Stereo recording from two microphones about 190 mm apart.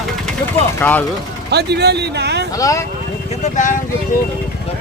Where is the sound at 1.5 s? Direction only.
60° right (ahead or behind).